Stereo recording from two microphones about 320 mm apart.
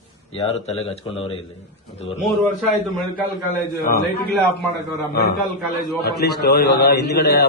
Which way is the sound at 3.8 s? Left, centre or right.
Left.